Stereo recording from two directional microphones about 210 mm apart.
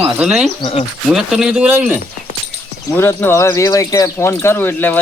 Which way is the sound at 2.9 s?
10° left (ahead or behind).